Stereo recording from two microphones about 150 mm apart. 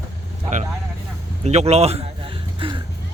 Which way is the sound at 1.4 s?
45° right (ahead or behind).